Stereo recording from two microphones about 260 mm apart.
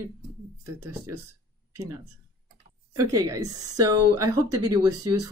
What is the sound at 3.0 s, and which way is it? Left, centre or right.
Speech, centre.